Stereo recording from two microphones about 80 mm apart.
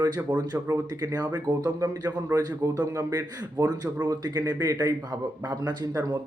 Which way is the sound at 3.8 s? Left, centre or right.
Right.